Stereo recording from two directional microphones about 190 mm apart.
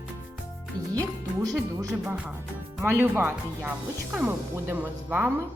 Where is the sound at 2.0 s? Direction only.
5° right (ahead or behind).